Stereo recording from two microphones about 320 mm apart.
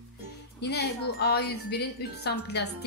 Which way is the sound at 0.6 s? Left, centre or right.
Left.